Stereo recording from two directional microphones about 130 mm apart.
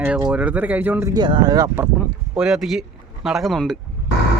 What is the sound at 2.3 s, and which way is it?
Speech, 5° right (ahead or behind).